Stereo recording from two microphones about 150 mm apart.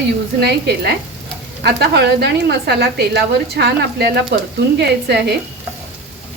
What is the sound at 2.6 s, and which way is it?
Speech, 90° right.